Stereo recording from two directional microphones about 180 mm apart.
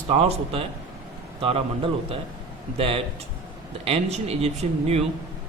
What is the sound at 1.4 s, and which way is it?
Speech, 30° right (ahead or behind).